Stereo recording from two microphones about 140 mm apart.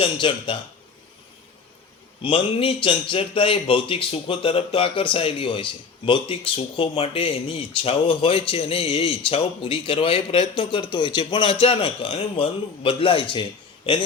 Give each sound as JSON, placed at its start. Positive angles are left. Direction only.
{"t": 0.0, "sound": "speech", "side_deg": 35}
{"t": 2.2, "sound": "speech", "side_deg": 40}